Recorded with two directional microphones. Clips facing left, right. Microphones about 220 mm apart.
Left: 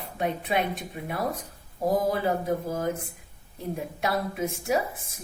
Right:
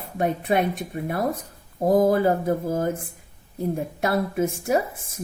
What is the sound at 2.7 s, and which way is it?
Speech, 50° right (ahead or behind).